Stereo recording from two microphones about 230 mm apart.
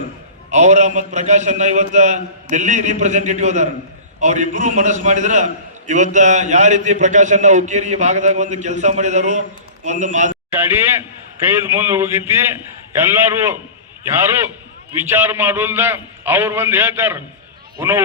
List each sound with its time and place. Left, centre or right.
0.5 s a man's voice: right
10.5 s a man's voice: centre
15.0 s a man's voice: centre